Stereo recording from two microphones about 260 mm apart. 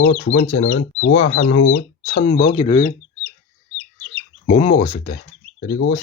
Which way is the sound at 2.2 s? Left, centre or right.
Left.